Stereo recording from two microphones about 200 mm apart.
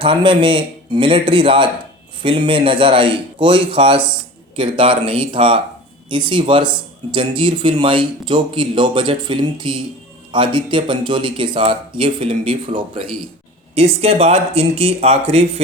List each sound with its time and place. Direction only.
0.0 s speech: 25° right (ahead or behind)